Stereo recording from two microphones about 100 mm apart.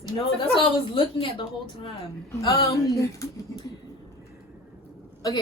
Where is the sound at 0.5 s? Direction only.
55° left (ahead or behind).